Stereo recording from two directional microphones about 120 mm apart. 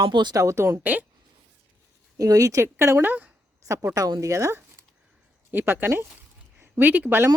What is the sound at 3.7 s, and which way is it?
A woman's voice, 25° right (ahead or behind).